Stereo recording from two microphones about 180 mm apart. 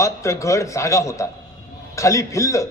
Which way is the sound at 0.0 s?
15° left (ahead or behind).